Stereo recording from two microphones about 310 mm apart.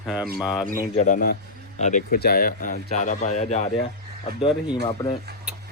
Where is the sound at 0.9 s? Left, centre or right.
Left.